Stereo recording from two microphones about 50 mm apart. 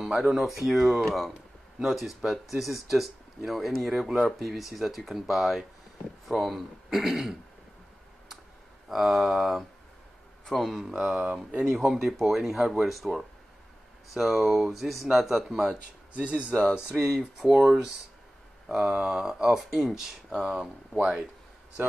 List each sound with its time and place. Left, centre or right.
0.0 s speech: centre
8.8 s a man's voice: centre
10.9 s speech: right
11.7 s speech: centre
16.1 s speech: right
16.9 s speech: centre
19.5 s speech: centre